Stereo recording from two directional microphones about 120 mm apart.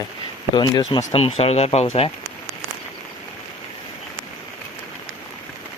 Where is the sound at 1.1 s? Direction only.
55° left (ahead or behind).